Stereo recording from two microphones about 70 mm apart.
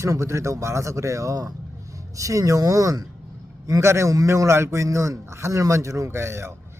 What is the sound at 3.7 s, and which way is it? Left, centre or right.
A man's voice, right.